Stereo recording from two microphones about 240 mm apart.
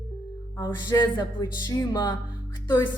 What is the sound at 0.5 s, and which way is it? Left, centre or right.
Speech, centre.